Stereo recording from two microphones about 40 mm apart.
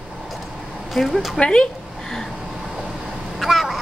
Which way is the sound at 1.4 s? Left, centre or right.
Left.